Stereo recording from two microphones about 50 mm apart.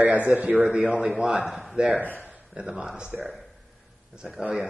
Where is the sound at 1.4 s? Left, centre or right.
Centre.